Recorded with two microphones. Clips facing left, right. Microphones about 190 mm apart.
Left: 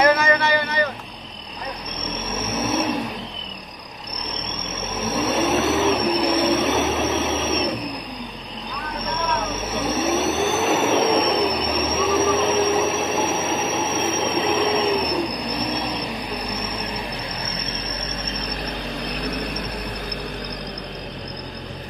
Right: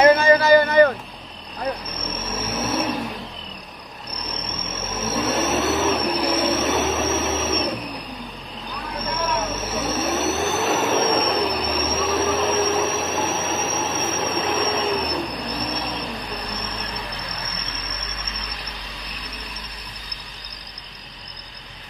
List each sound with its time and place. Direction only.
0.0 s a sound: 30° right (ahead or behind); by 0.9 s 50° right (ahead or behind)
2.0 s vehicle: centre (ahead or behind)
5.0 s a sound: centre (ahead or behind)
9.0 s vehicle: centre (ahead or behind)
14.2 s train: centre (ahead or behind)
19.1 s vehicle: 60° left (ahead or behind)